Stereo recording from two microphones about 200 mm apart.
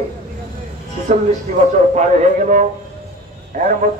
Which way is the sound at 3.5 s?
40° right (ahead or behind).